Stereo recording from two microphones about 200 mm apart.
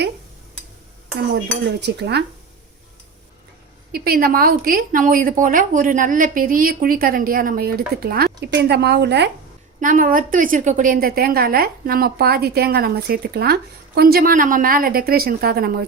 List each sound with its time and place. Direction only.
1.3 s cutlery: 60° right (ahead or behind)
3.9 s a woman's voice: 45° right (ahead or behind)
9.8 s a woman's voice: 40° right (ahead or behind)